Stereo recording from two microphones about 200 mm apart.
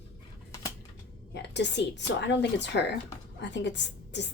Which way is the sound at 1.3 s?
60° left (ahead or behind).